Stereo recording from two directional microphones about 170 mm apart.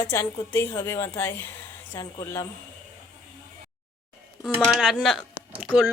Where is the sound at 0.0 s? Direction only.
20° left (ahead or behind).